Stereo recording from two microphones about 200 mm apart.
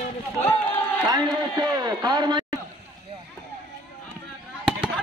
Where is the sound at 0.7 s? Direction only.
10° left (ahead or behind).